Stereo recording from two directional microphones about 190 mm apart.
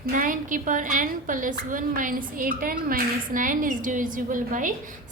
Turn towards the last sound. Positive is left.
turn(degrees=-45)  # may be behind; listen again after turning